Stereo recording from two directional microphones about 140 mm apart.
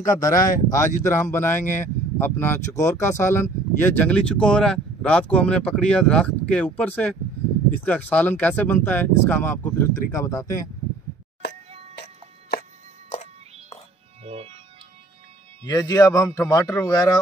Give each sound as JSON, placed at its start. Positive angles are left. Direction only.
{"t": 0.0, "sound": "a man's voice", "side_deg": 25}
{"t": 13.1, "sound": "music", "side_deg": 60}
{"t": 14.2, "sound": "music", "side_deg": -45}
{"t": 15.6, "sound": "a man's voice", "side_deg": 25}